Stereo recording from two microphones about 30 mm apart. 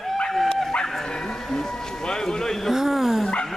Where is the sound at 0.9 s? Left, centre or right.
Centre.